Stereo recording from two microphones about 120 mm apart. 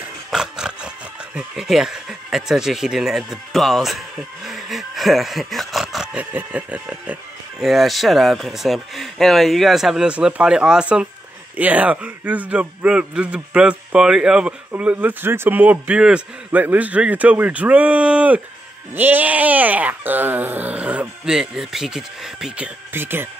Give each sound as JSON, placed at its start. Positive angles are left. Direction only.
{"t": 0.3, "sound": "speech", "side_deg": -5}
{"t": 4.5, "sound": "a sound", "side_deg": 0}
{"t": 6.3, "sound": "a man's voice", "side_deg": -10}
{"t": 22.9, "sound": "a man's voice", "side_deg": -20}